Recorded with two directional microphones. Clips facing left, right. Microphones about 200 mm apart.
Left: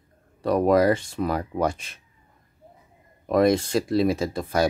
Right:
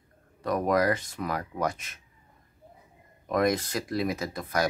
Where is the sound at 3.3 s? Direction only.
30° left (ahead or behind).